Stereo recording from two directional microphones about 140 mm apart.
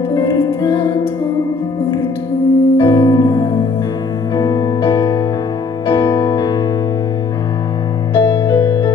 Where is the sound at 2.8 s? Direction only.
25° left (ahead or behind).